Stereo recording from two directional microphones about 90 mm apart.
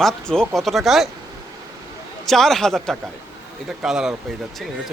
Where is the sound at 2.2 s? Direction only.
5° left (ahead or behind).